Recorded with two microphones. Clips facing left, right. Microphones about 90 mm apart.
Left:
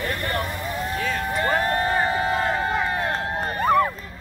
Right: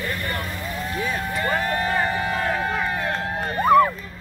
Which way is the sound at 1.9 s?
25° left (ahead or behind).